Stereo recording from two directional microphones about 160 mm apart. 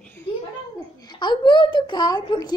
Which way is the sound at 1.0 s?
30° left (ahead or behind).